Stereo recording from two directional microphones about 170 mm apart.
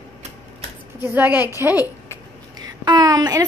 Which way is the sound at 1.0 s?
10° right (ahead or behind).